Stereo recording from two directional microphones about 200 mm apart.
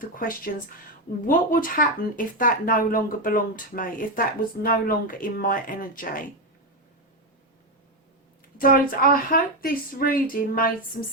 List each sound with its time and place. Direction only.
0.0 s speech: 45° left (ahead or behind)
8.5 s speech: 45° left (ahead or behind)